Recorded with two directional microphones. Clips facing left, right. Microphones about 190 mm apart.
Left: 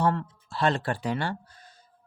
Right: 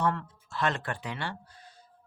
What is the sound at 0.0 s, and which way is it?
Speech, 30° left (ahead or behind).